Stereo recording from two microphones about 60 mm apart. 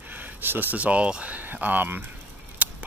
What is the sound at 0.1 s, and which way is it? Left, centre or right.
Speech, right.